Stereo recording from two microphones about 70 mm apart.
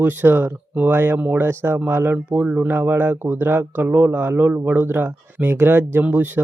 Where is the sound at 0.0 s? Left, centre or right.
Right.